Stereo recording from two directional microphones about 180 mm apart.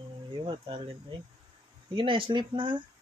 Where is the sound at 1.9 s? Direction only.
30° right (ahead or behind).